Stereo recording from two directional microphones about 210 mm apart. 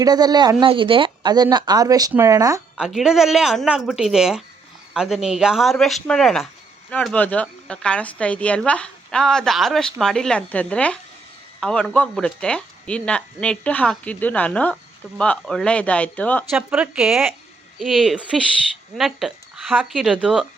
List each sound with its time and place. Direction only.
0.0 s speech: 20° right (ahead or behind)
2.7 s speech: 5° right (ahead or behind)
16.5 s speech: 5° right (ahead or behind)